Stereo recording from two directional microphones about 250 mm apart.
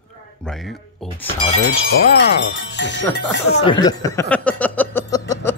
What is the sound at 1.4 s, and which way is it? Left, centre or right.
Speech, left.